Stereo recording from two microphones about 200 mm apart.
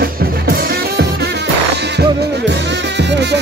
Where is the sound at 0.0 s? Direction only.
50° right (ahead or behind).